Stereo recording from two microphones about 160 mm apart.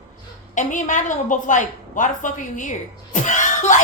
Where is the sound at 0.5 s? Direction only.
50° left (ahead or behind).